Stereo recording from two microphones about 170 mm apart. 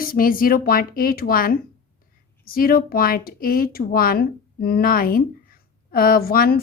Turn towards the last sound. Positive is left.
turn(degrees=60)  # may be behind; listen again after turning